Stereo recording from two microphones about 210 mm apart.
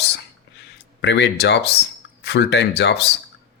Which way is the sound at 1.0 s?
55° left (ahead or behind).